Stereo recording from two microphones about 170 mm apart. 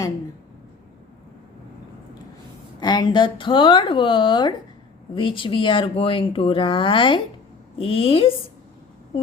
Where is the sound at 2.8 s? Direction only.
25° left (ahead or behind).